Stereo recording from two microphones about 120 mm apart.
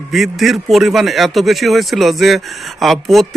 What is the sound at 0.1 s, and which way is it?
Speech, centre (ahead or behind).